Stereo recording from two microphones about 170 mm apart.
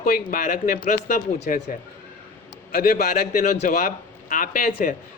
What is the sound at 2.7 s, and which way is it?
A man's voice, 60° left (ahead or behind).